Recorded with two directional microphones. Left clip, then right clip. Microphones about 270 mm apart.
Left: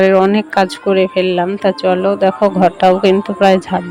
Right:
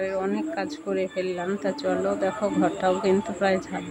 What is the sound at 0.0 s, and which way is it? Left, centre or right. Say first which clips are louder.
Speech: left 16 dB; left.